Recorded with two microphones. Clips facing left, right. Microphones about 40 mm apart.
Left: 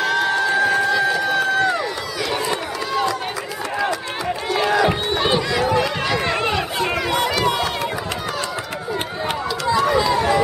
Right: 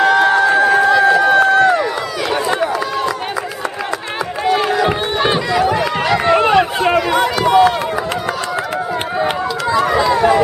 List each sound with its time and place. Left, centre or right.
0.0 s a sound: centre
4.6 s crowd: centre
4.8 s crowd: right
5.7 s run: centre
7.0 s run: centre
9.7 s run: centre